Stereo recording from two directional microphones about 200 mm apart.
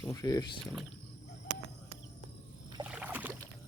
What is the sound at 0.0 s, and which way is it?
Speech, 15° left (ahead or behind).